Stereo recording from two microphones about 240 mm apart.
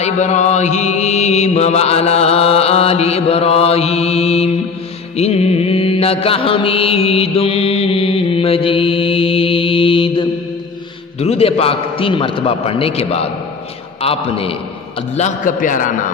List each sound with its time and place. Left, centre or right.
0.0 s mantra: left
15.1 s a man's voice: left